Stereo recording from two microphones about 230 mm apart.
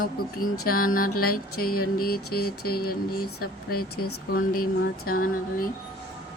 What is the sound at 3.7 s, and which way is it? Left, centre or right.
Speech, left.